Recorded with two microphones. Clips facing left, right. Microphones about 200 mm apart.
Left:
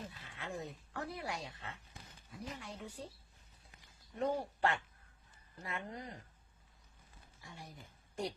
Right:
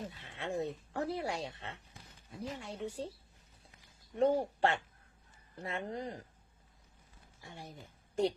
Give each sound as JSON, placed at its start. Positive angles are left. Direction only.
{"t": 0.3, "sound": "speech", "side_deg": -30}
{"t": 4.2, "sound": "speech", "side_deg": -30}
{"t": 7.4, "sound": "speech", "side_deg": -25}